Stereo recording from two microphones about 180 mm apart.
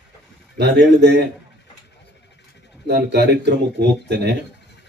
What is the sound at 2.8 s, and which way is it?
Speech, 70° right (ahead or behind).